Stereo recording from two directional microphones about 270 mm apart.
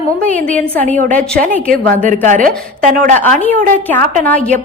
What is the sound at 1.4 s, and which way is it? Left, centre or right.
A woman's voice, right.